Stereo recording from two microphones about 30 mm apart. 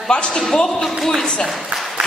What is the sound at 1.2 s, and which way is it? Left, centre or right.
Speech, left.